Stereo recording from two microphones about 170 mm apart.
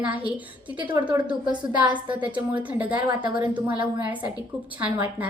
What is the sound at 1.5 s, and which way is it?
Speech, 25° right (ahead or behind).